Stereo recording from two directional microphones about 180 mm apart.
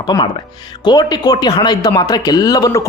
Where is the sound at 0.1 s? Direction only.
15° left (ahead or behind).